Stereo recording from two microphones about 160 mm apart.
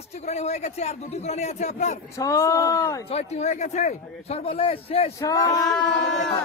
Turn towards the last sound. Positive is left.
turn(degrees=0)  # may be behind; listen again after turning